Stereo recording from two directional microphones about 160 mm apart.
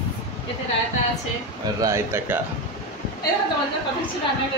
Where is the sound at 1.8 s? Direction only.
20° right (ahead or behind).